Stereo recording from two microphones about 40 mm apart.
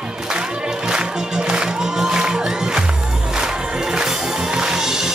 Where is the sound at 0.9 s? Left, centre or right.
Centre.